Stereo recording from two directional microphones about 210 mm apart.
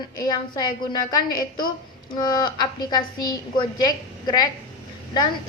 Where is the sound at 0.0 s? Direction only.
20° left (ahead or behind).